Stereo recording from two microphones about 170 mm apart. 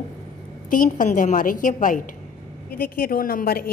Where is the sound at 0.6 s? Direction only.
50° left (ahead or behind).